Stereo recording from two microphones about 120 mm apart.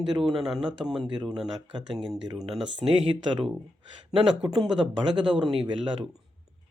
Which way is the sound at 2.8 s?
50° right (ahead or behind).